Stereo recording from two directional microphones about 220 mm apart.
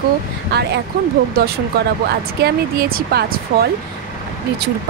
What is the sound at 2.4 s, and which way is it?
Speech, 45° right (ahead or behind).